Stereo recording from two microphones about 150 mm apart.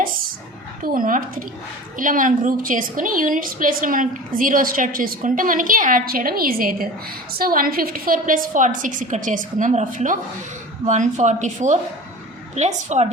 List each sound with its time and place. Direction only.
0.9 s a woman's voice: 65° right (ahead or behind); by 13.1 s 50° right (ahead or behind)